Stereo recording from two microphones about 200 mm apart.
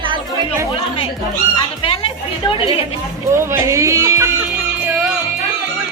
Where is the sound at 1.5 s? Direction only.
25° left (ahead or behind).